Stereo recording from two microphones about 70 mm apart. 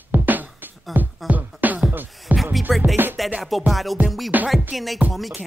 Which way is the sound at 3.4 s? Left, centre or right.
Centre.